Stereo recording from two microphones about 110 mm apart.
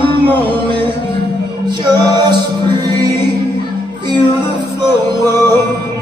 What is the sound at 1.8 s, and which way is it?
Music, 40° right (ahead or behind).